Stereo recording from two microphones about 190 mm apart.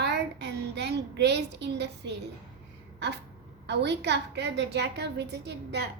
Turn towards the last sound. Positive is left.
turn(degrees=-60)  # may be behind; listen again after turning